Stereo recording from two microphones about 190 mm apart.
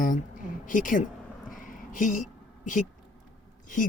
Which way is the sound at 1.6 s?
45° left (ahead or behind).